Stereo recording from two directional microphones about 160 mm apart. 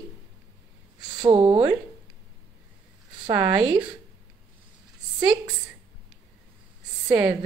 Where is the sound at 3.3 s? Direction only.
10° right (ahead or behind).